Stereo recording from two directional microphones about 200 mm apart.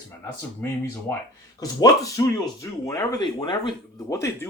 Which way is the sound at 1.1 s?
15° left (ahead or behind).